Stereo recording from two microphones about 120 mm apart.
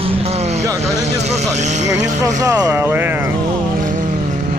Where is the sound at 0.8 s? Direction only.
65° right (ahead or behind).